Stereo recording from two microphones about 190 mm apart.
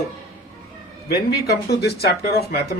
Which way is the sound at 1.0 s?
55° left (ahead or behind).